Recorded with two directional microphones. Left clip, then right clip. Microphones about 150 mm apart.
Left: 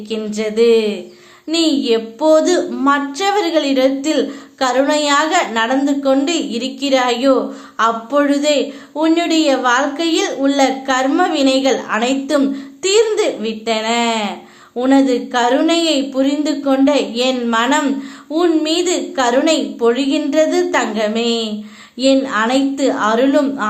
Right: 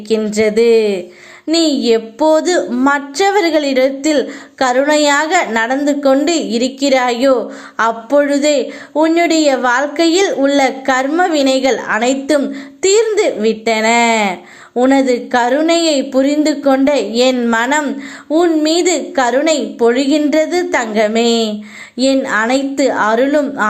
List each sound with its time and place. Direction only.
0.3 s a woman's voice: 40° right (ahead or behind)
17.8 s a sound: 30° right (ahead or behind)
18.6 s a woman's voice: 40° right (ahead or behind)